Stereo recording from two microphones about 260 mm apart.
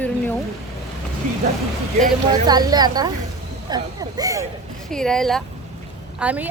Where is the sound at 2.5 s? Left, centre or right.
Centre.